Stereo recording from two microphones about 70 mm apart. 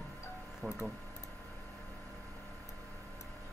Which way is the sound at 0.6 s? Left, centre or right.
Right.